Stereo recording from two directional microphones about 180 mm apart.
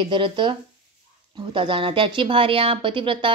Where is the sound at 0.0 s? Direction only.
30° right (ahead or behind).